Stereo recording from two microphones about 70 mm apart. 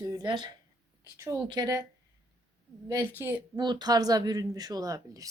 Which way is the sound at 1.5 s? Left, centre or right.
Right.